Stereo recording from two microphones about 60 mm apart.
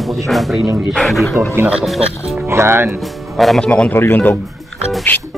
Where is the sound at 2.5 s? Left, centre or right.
Right.